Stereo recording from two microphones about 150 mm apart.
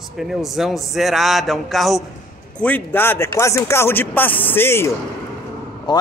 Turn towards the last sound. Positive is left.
turn(degrees=30)  # may be behind; listen again after turning